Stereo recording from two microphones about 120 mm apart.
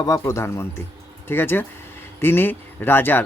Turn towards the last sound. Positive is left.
turn(degrees=15)  # may be behind; listen again after turning